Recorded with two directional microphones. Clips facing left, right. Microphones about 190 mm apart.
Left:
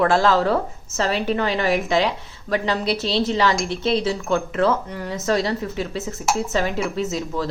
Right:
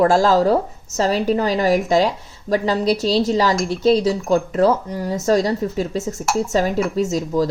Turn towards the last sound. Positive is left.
turn(degrees=-40)  # may be behind; listen again after turning